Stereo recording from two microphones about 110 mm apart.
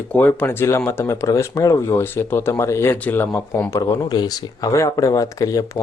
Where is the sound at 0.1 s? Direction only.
15° left (ahead or behind).